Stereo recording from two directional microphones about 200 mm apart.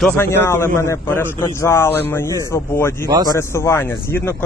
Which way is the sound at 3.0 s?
20° right (ahead or behind).